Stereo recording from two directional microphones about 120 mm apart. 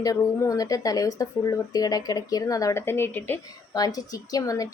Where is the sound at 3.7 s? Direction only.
30° left (ahead or behind).